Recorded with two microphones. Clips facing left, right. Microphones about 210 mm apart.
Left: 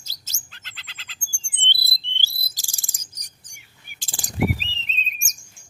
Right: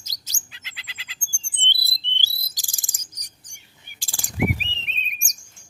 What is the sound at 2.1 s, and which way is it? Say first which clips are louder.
Bird vocalization: even; 15° right (ahead or behind).